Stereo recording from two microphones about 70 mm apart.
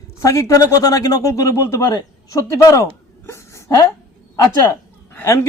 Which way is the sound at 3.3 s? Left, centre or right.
Left.